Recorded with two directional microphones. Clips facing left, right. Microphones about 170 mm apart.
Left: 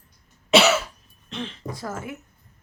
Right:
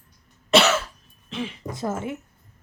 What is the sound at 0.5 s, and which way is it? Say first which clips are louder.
Cough: left 1 dB; 10° left (ahead or behind).